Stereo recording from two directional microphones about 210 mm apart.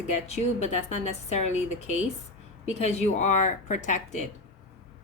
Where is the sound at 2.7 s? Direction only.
35° left (ahead or behind).